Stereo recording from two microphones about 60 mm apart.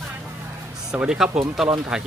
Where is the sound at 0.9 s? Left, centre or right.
Centre.